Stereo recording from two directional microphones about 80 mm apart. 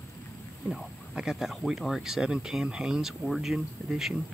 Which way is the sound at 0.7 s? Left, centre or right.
Centre.